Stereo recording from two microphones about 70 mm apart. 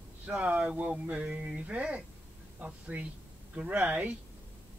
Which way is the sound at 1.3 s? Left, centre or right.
Centre.